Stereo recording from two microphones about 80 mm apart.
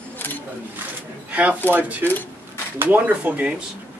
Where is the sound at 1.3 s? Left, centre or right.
Centre.